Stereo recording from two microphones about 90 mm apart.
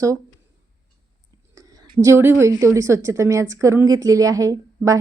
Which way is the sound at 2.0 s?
30° right (ahead or behind).